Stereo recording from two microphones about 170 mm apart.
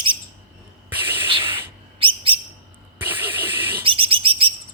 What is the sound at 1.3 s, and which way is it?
Sanding, 30° right (ahead or behind).